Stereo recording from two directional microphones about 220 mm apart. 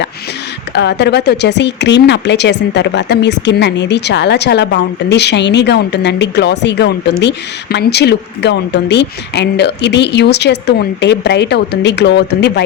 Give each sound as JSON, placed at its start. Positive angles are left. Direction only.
{"t": 0.7, "sound": "speech", "side_deg": 50}